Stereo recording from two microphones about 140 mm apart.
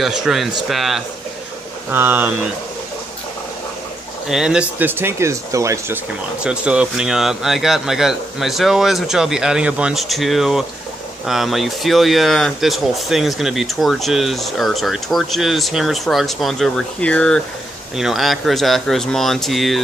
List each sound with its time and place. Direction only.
0.0 s speech: 5° right (ahead or behind)
1.9 s speech: 15° right (ahead or behind)
4.3 s speech: 5° right (ahead or behind); by 5.9 s 20° right (ahead or behind)
6.4 s speech: 10° right (ahead or behind)